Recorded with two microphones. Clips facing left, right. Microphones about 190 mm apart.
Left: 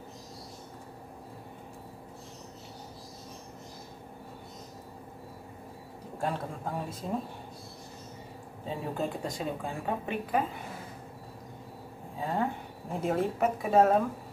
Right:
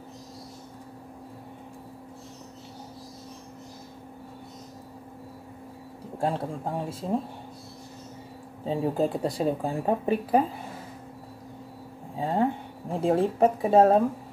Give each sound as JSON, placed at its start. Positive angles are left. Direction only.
{"t": 6.2, "sound": "speech", "side_deg": -30}
{"t": 8.6, "sound": "speech", "side_deg": -35}
{"t": 12.2, "sound": "a sound", "side_deg": -30}
{"t": 13.0, "sound": "speech", "side_deg": -30}